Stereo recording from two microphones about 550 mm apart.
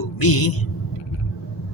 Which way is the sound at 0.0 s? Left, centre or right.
Left.